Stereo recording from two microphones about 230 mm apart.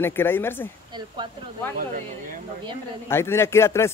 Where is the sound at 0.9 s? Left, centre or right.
Centre.